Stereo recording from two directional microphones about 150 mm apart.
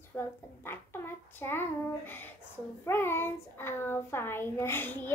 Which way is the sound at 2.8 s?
15° left (ahead or behind).